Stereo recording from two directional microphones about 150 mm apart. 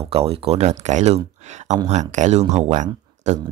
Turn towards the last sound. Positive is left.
turn(degrees=-55)  # may be behind; listen again after turning